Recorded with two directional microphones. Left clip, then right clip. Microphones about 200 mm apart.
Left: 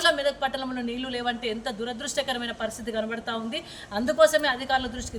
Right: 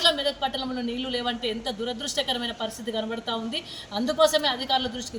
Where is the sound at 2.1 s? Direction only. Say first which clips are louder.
Right 1 dB; 5° left (ahead or behind).